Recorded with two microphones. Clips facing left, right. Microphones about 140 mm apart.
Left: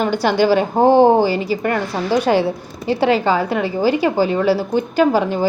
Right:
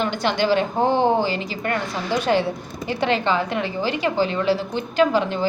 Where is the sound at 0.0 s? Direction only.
40° left (ahead or behind).